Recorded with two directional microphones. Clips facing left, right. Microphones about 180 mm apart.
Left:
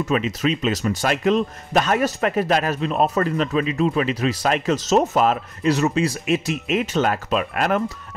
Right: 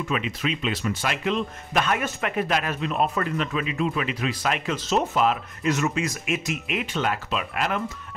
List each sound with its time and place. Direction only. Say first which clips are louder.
0.0 s a man's voice: left 6 dB; 40° left (ahead or behind)